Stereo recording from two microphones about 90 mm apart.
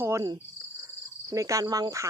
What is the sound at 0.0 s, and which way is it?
Cricket, 35° right (ahead or behind).